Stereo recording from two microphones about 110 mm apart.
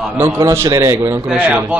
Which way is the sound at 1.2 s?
10° right (ahead or behind).